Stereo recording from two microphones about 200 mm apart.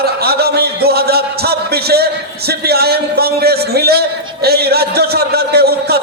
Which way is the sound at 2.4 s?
50° right (ahead or behind).